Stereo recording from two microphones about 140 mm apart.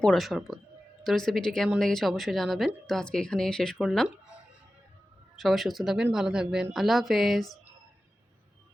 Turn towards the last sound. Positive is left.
turn(degrees=0)  # may be behind; listen again after turning